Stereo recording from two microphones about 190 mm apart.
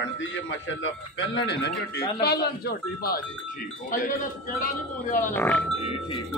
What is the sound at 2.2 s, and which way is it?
Speech, 55° left (ahead or behind).